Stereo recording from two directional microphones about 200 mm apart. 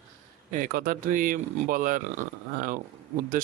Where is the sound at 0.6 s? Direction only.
45° right (ahead or behind).